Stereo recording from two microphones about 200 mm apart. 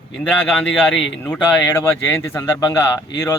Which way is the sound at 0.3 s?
5° left (ahead or behind).